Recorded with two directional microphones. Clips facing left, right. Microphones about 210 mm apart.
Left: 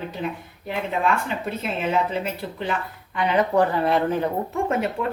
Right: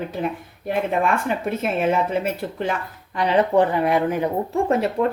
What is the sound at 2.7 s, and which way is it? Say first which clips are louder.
Speech: right 1 dB; 40° right (ahead or behind).